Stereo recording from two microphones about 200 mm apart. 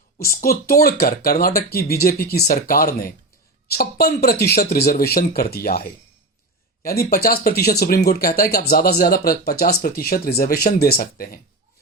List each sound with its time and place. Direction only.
0.2 s speech: 50° left (ahead or behind)